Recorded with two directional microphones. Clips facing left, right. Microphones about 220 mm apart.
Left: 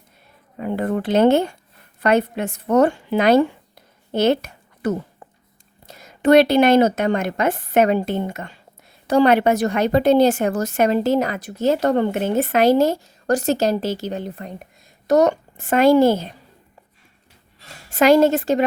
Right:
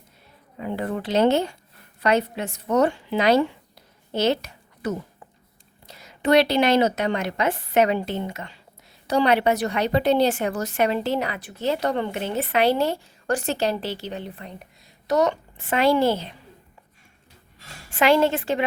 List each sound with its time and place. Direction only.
0.6 s a woman's voice: 50° left (ahead or behind)
17.9 s speech: 40° left (ahead or behind)